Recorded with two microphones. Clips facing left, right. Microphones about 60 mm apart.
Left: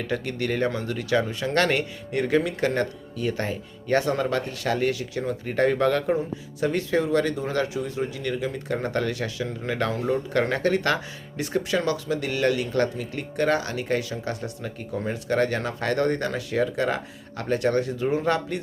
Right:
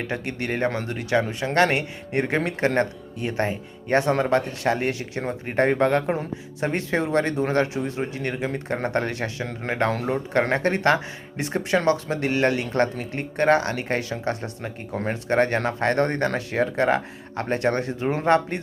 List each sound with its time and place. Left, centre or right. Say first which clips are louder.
0.0 s speech: left 1 dB; right